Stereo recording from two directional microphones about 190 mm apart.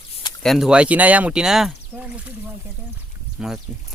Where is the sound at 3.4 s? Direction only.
5° right (ahead or behind).